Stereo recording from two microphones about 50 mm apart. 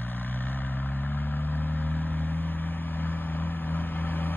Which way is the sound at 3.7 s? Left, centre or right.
Left.